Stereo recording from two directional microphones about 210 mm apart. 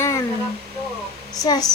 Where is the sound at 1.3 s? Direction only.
15° left (ahead or behind).